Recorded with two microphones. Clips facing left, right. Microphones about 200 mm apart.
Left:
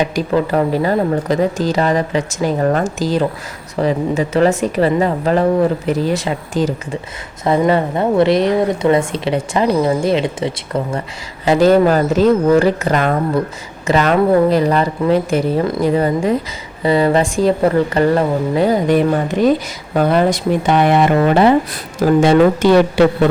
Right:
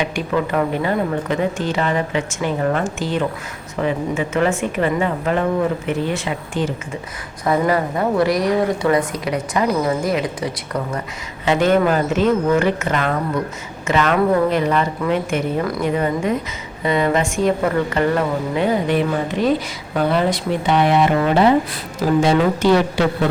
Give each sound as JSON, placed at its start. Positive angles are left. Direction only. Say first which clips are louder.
{"t": 0.0, "sound": "speech", "louder": "left 4 dB", "side_deg": 35}
{"t": 7.4, "sound": "a woman's voice", "louder": "left 4 dB", "side_deg": 25}
{"t": 22.2, "sound": "speech", "louder": "left 6 dB", "side_deg": 55}